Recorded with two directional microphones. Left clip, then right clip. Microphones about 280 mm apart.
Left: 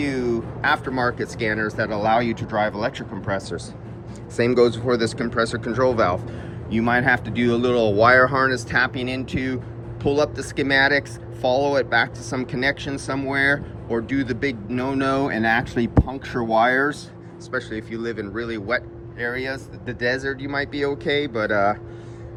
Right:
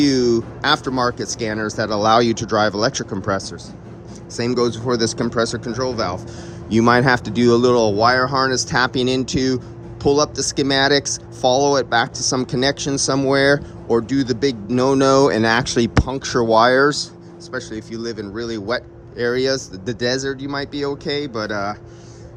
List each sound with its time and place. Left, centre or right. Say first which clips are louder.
0.0 s speech: right 7 dB; right; by 6.1 s centre
6.7 s speech: right 5 dB; right